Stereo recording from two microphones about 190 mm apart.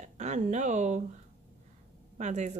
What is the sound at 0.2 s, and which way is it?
Speech, 40° right (ahead or behind).